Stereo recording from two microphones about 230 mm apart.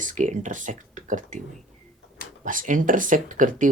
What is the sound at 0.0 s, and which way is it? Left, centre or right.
Speech, right.